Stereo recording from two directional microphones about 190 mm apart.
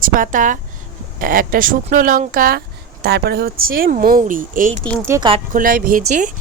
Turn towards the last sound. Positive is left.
turn(degrees=-45)  # may be behind; listen again after turning